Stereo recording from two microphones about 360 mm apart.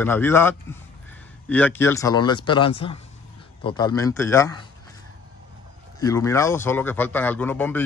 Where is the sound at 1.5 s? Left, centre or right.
Centre.